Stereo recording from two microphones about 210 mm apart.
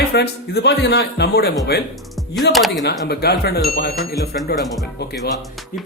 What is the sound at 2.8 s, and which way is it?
Speech, 50° left (ahead or behind).